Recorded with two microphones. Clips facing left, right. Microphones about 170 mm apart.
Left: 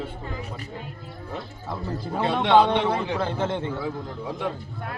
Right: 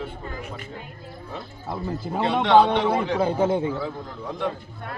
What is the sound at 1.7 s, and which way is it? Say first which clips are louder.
A man's voice: right 2 dB; 10° right (ahead or behind).